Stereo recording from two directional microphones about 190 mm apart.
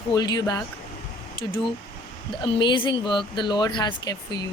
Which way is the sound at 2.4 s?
25° left (ahead or behind).